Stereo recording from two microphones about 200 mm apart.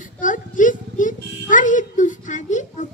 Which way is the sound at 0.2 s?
40° left (ahead or behind).